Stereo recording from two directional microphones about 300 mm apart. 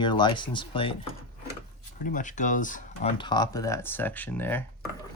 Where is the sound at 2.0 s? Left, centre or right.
Left.